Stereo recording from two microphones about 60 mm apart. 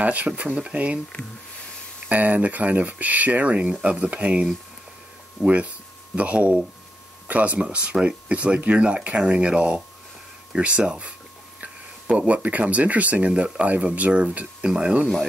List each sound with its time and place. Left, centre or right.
0.0 s speech: right
2.0 s speech: right
7.6 s speech: centre